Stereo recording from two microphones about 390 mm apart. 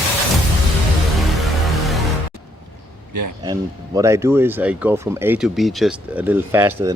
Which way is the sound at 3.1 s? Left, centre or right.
Right.